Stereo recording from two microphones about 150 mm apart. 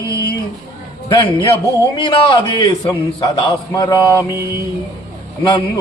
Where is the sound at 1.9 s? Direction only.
35° left (ahead or behind).